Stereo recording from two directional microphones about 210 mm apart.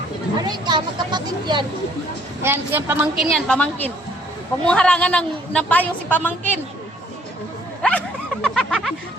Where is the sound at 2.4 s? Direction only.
10° right (ahead or behind).